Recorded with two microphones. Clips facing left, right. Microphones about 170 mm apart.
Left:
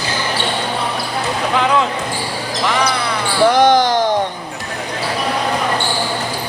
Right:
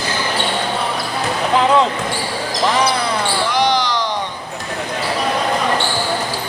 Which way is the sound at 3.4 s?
50° left (ahead or behind).